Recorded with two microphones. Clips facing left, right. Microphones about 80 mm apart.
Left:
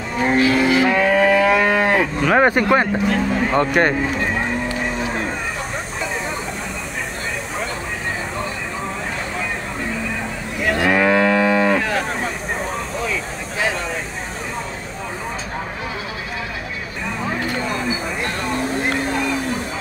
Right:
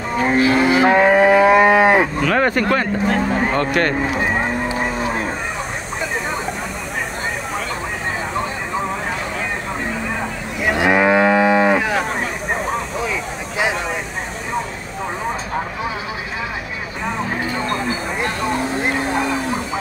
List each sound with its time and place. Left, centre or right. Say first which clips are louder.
0.4 s livestock: right 2 dB; right
1.2 s moo: right 4 dB; right
2.2 s speech: left 2 dB; centre
3.1 s speech: right 1 dB; right
3.8 s speech: left 2 dB; centre
10.6 s moo: right 1 dB; centre